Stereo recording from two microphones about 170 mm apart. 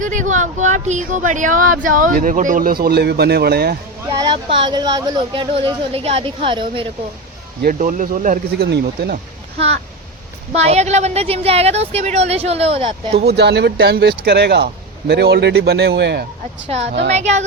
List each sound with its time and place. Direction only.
0.0 s speech: 50° right (ahead or behind)
2.8 s speech: 70° right (ahead or behind)
4.2 s speech: 30° right (ahead or behind)
7.6 s speech: 50° right (ahead or behind)
8.6 s speech: 75° right (ahead or behind)
10.5 s a woman's voice: 40° right (ahead or behind)
13.1 s speech: 75° right (ahead or behind)
16.6 s a woman's voice: 35° right (ahead or behind)